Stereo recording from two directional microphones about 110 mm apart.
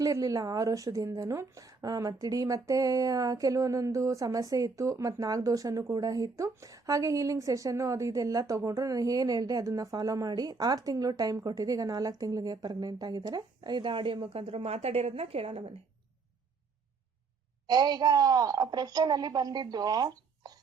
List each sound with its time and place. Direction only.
0.0 s a woman's voice: 30° right (ahead or behind); by 15.7 s 60° right (ahead or behind)
17.7 s a woman's voice: 35° right (ahead or behind)